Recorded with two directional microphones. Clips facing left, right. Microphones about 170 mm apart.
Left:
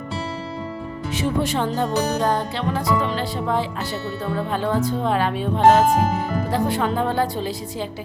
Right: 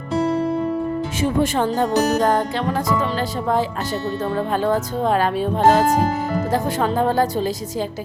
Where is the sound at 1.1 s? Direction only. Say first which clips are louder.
Right 1 dB; 45° right (ahead or behind).